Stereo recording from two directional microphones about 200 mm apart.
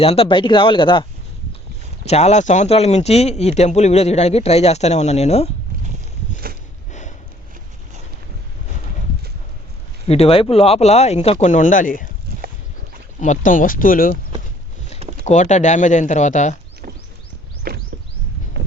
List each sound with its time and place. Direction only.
0.0 s speech: 30° left (ahead or behind)
2.0 s speech: 35° left (ahead or behind)
10.1 s speech: 30° left (ahead or behind)
13.1 s speech: 35° left (ahead or behind)
15.2 s speech: 35° left (ahead or behind)
16.8 s a sound: 40° right (ahead or behind)